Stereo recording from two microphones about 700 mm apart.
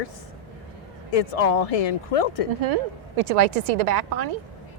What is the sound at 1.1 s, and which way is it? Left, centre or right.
Speech, left.